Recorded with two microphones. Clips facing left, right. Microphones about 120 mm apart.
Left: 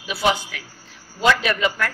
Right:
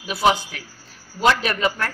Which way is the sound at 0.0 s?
40° right (ahead or behind).